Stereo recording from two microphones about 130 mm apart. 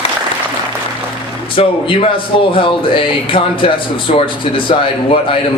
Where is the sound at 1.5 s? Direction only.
45° left (ahead or behind).